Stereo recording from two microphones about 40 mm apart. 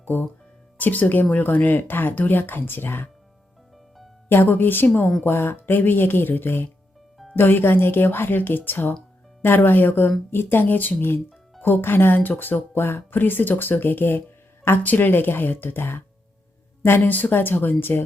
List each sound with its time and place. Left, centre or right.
0.0 s speech: left
4.4 s speech: left
5.2 s speech: left
11.6 s speech: left
12.1 s speech: left
17.0 s speech: left